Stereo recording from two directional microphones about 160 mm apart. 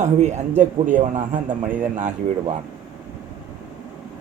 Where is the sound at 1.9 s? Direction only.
50° right (ahead or behind).